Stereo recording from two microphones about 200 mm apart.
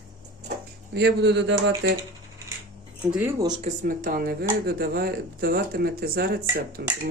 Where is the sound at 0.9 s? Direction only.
60° right (ahead or behind).